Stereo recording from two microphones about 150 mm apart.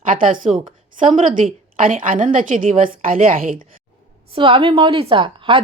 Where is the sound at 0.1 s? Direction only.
65° right (ahead or behind).